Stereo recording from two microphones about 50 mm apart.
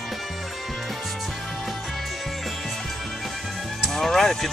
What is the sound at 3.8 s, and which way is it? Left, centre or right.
Music, centre.